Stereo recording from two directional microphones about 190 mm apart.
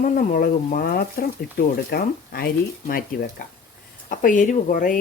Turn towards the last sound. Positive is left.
turn(degrees=45)  # may be behind; listen again after turning